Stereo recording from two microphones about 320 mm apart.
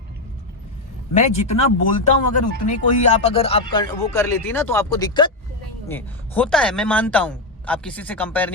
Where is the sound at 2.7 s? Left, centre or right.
Left; by 8.5 s centre.